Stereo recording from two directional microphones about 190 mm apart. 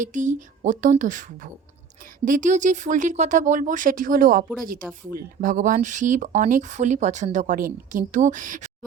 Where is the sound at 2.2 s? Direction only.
45° right (ahead or behind).